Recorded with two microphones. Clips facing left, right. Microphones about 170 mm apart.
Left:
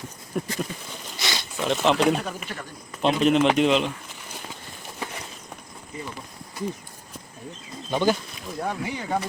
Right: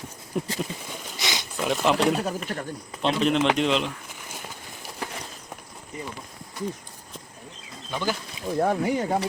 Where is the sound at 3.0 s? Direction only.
5° left (ahead or behind).